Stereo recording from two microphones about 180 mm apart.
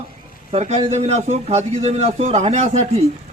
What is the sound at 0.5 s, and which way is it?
A man's voice, 35° right (ahead or behind).